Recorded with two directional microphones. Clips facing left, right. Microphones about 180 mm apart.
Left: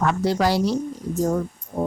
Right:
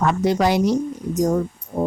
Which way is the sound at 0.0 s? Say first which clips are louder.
Right 2 dB; 20° right (ahead or behind).